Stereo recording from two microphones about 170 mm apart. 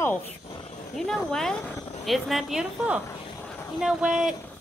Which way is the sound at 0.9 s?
5° left (ahead or behind).